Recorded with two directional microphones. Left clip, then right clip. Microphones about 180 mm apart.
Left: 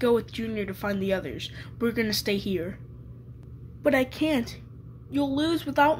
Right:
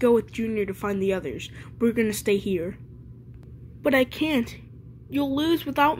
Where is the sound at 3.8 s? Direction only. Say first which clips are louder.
Right 2 dB; 15° right (ahead or behind).